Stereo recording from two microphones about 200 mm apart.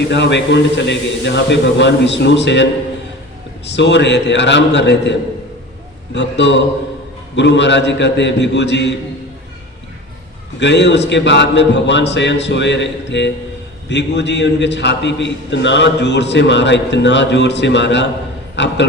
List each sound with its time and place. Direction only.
0.1 s a man's voice: 60° left (ahead or behind)
3.7 s a man's voice: 60° left (ahead or behind)
6.1 s a man's voice: 60° left (ahead or behind)
10.6 s a man's voice: 60° left (ahead or behind)